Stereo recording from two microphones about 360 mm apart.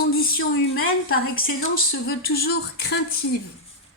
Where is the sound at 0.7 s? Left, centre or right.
Left.